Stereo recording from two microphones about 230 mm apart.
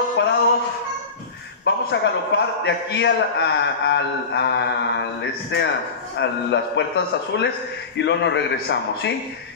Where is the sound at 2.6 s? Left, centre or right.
Left.